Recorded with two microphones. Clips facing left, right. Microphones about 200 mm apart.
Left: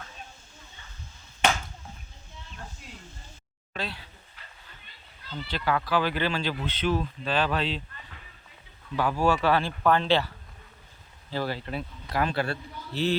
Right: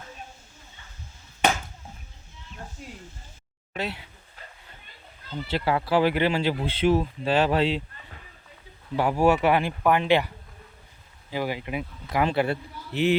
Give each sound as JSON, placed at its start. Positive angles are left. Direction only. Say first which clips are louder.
{"t": 3.8, "sound": "speech", "louder": "right 4 dB", "side_deg": -20}
{"t": 5.5, "sound": "a man's voice", "louder": "right 3 dB", "side_deg": -25}